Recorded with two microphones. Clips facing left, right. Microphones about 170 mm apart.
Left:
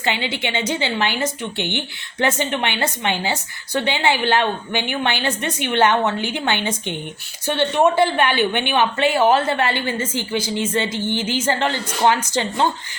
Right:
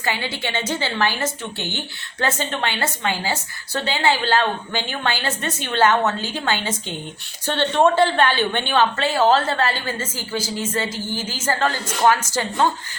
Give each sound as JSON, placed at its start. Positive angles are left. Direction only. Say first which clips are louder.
{"t": 0.0, "sound": "a woman's voice", "louder": "left 2 dB", "side_deg": 20}